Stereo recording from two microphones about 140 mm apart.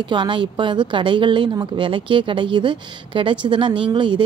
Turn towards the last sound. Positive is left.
turn(degrees=-35)  # may be behind; listen again after turning